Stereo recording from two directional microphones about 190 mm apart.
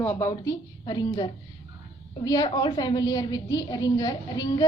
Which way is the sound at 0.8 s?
25° left (ahead or behind).